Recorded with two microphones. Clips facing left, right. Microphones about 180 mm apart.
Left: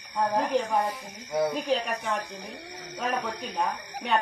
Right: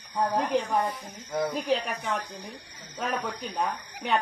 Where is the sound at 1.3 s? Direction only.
5° left (ahead or behind).